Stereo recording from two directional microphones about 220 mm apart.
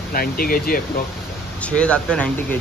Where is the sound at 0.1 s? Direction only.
40° left (ahead or behind).